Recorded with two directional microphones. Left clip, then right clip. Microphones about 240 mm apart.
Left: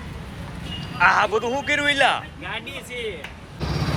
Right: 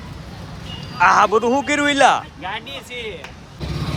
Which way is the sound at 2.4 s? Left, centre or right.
Right.